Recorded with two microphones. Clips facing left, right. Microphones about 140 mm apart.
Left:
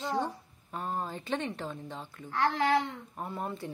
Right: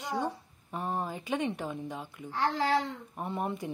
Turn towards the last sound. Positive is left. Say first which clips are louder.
# right 3 dB
turn(degrees=-15)  # may be behind; listen again after turning